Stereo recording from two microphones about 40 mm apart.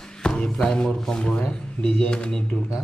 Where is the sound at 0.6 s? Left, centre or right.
Centre.